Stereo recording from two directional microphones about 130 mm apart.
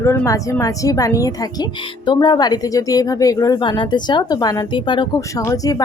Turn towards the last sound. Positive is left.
turn(degrees=25)  # may be behind; listen again after turning